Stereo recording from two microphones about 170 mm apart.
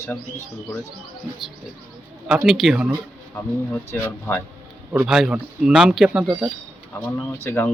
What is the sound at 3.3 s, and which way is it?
Speech, 10° left (ahead or behind).